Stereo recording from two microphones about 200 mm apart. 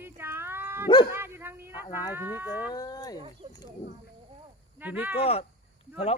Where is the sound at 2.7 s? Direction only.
20° left (ahead or behind).